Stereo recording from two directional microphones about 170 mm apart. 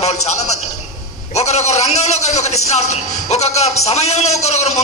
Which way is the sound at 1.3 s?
40° left (ahead or behind).